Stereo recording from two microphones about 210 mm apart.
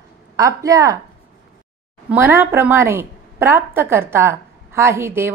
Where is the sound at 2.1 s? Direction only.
10° right (ahead or behind).